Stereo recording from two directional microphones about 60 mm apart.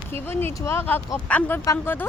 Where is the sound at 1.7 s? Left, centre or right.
Left.